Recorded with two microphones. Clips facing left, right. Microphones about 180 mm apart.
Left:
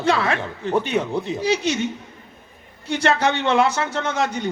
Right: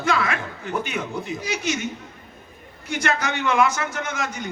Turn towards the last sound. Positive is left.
turn(degrees=35)  # may be behind; listen again after turning